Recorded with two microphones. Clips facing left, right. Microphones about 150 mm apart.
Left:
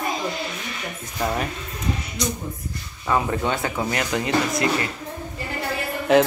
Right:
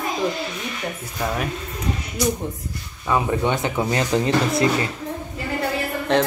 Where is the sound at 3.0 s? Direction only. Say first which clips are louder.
Right 2 dB; 15° right (ahead or behind).